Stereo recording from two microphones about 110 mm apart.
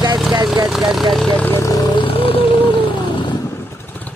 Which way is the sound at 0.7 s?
Centre (ahead or behind).